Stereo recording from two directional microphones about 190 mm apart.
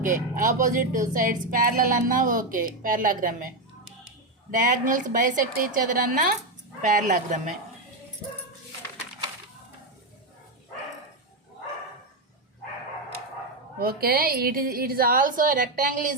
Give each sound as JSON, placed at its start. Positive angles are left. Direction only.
{"t": 0.0, "sound": "speech", "side_deg": -45}
{"t": 4.5, "sound": "speech", "side_deg": -45}
{"t": 13.7, "sound": "speech", "side_deg": -50}